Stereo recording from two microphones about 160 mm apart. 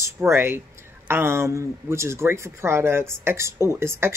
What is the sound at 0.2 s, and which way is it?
Speech, 15° right (ahead or behind).